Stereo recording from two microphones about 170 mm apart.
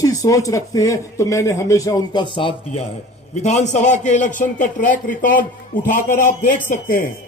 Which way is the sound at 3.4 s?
45° left (ahead or behind).